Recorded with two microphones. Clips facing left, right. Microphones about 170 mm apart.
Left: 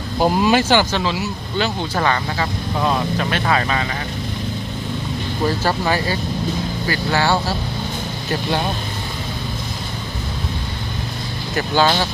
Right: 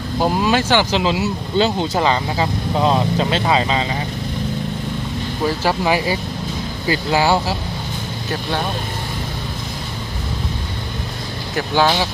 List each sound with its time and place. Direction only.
0.2 s speech: 5° left (ahead or behind)
1.0 s speech: 25° right (ahead or behind)
5.6 s speech: 10° right (ahead or behind)
11.5 s speech: centre (ahead or behind)